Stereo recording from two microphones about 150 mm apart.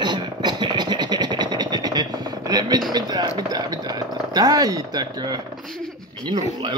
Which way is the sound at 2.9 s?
25° right (ahead or behind).